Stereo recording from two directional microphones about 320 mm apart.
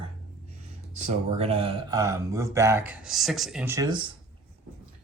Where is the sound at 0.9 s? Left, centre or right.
Centre.